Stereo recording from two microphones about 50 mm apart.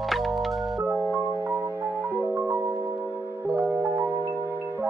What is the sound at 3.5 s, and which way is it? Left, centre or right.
Music, right.